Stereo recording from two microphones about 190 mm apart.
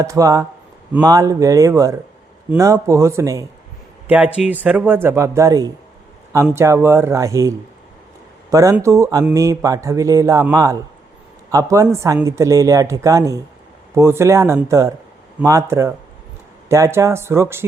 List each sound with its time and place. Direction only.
0.0 s speech: 15° right (ahead or behind)